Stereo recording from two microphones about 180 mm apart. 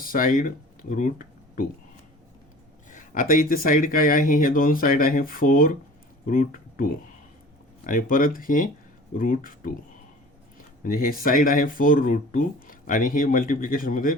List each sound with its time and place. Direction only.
0.0 s speech: 50° left (ahead or behind)
2.9 s speech: 50° left (ahead or behind)
10.8 s speech: 50° left (ahead or behind)